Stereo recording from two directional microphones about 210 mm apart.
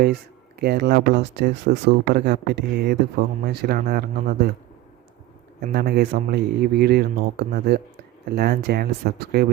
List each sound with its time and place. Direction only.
0.6 s speech: 50° right (ahead or behind)
5.7 s speech: 50° right (ahead or behind)